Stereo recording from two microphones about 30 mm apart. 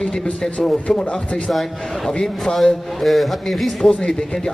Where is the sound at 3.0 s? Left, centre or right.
Centre.